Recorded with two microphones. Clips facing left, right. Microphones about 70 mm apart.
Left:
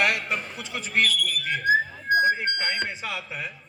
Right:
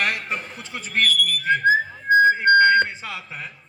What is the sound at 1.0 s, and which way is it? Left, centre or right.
Whistling, right.